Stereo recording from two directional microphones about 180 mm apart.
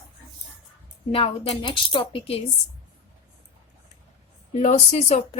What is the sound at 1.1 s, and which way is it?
Speech, 35° left (ahead or behind).